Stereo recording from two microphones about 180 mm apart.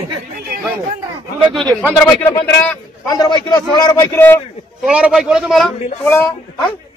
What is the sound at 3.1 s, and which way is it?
Speech, 25° left (ahead or behind).